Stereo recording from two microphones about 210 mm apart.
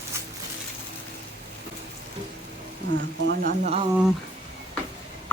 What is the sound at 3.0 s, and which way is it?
Speech, 55° right (ahead or behind).